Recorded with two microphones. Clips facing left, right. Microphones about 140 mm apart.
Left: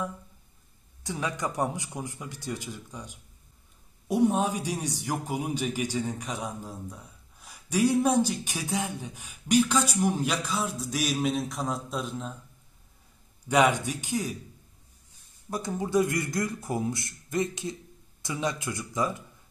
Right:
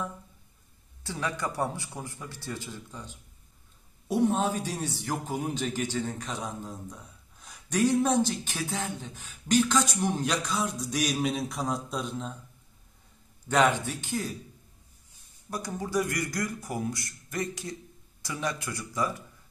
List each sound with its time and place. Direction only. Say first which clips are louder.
1.0 s a man's voice: left 1 dB; 15° left (ahead or behind); by 12.4 s centre (ahead or behind)
13.5 s a man's voice: left 1 dB; 10° left (ahead or behind)
15.5 s speech: left 4 dB; 25° left (ahead or behind)